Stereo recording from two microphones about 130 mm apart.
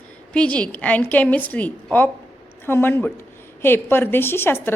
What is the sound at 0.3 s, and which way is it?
A woman's voice, 10° left (ahead or behind).